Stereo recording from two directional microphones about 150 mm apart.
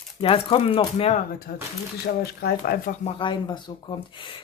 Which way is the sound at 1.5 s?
90° left.